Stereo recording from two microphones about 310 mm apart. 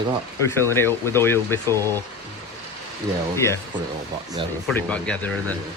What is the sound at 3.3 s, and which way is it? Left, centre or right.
Speech, centre.